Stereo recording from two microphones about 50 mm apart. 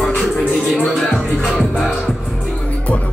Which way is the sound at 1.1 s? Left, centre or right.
Centre.